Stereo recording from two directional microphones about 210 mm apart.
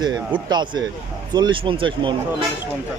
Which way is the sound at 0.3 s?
20° right (ahead or behind).